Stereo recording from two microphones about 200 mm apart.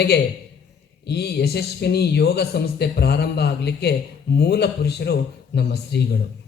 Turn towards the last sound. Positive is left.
turn(degrees=55)  # may be behind; listen again after turning